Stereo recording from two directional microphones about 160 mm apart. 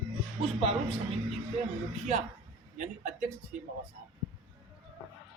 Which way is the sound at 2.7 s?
50° right (ahead or behind).